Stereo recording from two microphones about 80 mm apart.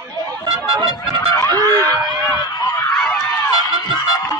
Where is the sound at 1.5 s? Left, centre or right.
Right.